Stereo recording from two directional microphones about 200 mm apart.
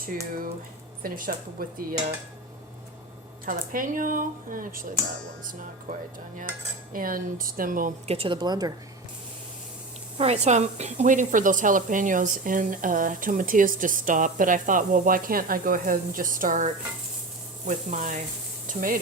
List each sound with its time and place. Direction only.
1.0 s speech: 45° right (ahead or behind)
3.4 s speech: 45° right (ahead or behind)
6.9 s speech: 45° right (ahead or behind); by 8.7 s 20° right (ahead or behind)
10.2 s speech: 30° right (ahead or behind)